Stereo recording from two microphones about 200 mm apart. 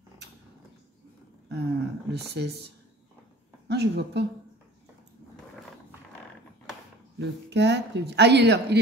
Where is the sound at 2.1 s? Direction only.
55° right (ahead or behind).